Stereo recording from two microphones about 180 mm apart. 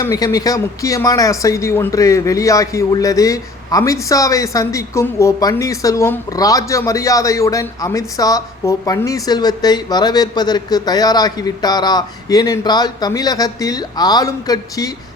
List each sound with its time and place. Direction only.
0.0 s speech: 15° left (ahead or behind)